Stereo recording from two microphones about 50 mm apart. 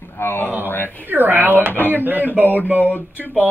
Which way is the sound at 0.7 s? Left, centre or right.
Left.